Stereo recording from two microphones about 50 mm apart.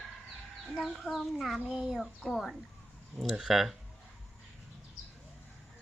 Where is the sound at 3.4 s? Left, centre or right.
Centre.